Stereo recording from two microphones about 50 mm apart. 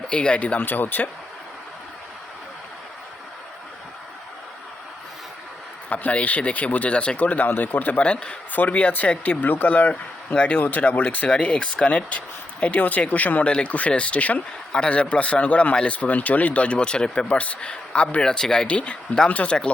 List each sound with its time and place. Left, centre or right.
0.1 s speech: left
0.6 s speech: left
5.9 s speech: left
8.0 s speech: left
8.5 s speech: left
10.2 s speech: left
13.5 s speech: centre